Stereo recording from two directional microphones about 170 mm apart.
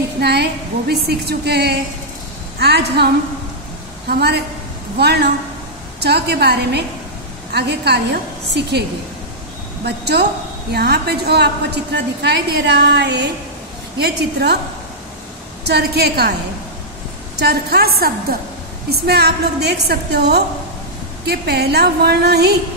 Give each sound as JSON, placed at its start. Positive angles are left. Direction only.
{"t": 0.2, "sound": "a woman's voice", "side_deg": -75}
{"t": 4.9, "sound": "a woman's voice", "side_deg": -75}
{"t": 9.8, "sound": "a woman's voice", "side_deg": -75}
{"t": 13.9, "sound": "a woman's voice", "side_deg": -75}
{"t": 15.6, "sound": "a woman's voice", "side_deg": -75}
{"t": 17.4, "sound": "a woman's voice", "side_deg": -70}